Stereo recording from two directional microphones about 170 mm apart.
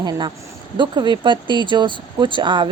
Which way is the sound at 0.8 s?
25° right (ahead or behind).